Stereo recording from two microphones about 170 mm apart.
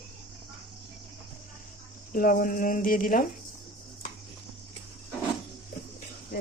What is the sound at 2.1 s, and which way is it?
Speech, 55° left (ahead or behind).